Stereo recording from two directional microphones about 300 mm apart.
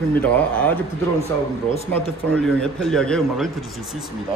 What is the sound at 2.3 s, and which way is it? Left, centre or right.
Speech, centre.